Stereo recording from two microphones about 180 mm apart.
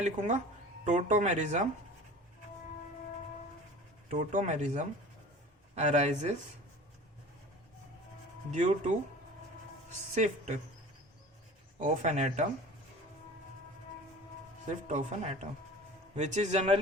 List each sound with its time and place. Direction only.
0.0 s speech: 40° right (ahead or behind)
4.1 s speech: 45° right (ahead or behind)
8.4 s speech: 40° right (ahead or behind)
10.2 s speech: 40° right (ahead or behind)
11.8 s speech: 40° right (ahead or behind)
14.8 s speech: 40° right (ahead or behind)